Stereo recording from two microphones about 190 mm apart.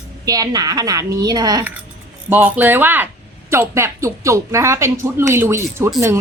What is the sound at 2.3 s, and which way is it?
Speech, 10° right (ahead or behind).